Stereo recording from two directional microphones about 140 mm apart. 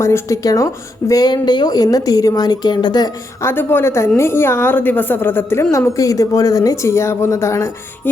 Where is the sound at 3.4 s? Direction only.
15° left (ahead or behind).